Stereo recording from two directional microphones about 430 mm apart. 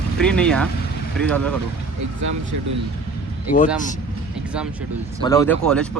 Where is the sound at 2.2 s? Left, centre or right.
Right.